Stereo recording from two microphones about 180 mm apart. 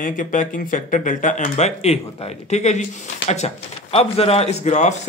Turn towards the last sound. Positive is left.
turn(degrees=40)  # may be behind; listen again after turning